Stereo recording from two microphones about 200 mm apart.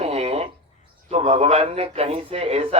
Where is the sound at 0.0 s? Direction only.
30° right (ahead or behind).